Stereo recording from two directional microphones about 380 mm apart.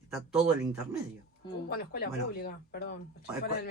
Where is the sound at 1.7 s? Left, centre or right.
Left.